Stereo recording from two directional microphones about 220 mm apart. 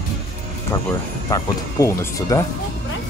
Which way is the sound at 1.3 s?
15° left (ahead or behind).